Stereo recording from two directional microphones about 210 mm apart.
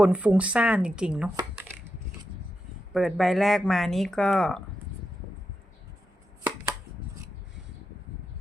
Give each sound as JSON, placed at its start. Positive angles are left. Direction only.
{"t": 0.0, "sound": "speech", "side_deg": -5}
{"t": 2.9, "sound": "speech", "side_deg": 0}